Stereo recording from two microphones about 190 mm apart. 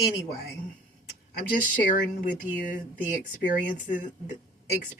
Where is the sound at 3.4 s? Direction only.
45° left (ahead or behind).